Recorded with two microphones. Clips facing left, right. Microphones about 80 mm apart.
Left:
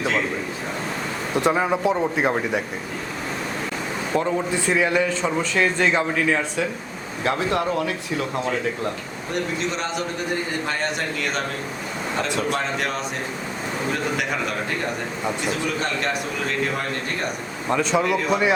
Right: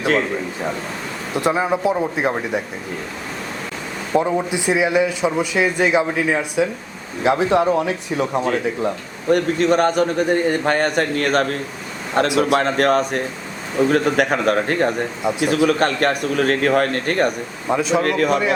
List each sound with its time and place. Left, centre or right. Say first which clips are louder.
1.3 s speech: right 2 dB; centre
4.1 s a man's voice: right 4 dB; centre
9.3 s a man's voice: right 10 dB; right
12.3 s a man's voice: right 7 dB; right
15.4 s a man's voice: right 12 dB; right
17.7 s speech: right 3 dB; centre
18.0 s a man's voice: right 4 dB; right